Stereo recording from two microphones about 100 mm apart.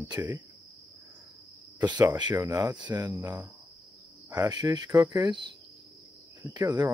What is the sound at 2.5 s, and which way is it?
Speech, 40° right (ahead or behind).